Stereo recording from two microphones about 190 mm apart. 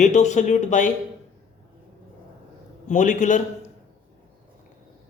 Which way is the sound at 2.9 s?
40° left (ahead or behind).